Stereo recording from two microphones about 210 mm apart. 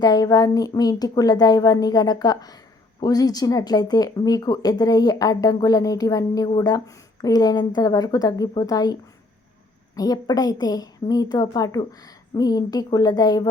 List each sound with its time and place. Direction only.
0.0 s a woman's voice: 15° left (ahead or behind)